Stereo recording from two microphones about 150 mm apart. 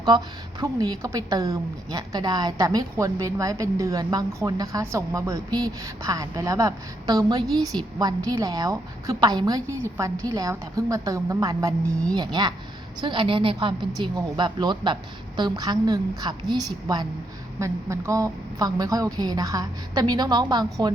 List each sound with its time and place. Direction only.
0.6 s a woman's voice: 25° right (ahead or behind)